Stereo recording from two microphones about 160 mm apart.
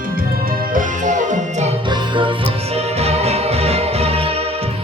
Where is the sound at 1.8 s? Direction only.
30° right (ahead or behind).